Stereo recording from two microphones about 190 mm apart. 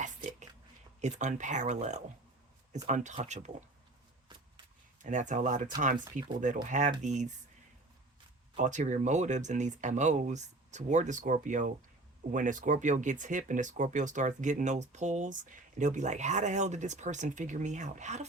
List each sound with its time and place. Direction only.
1.0 s speech: 40° right (ahead or behind)
5.0 s speech: 40° right (ahead or behind)
8.5 s speech: 40° right (ahead or behind)